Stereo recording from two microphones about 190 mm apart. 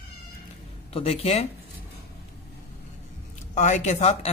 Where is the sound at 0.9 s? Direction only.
30° left (ahead or behind).